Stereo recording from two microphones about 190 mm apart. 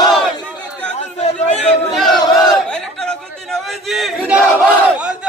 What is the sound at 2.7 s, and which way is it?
Chatter, 5° left (ahead or behind).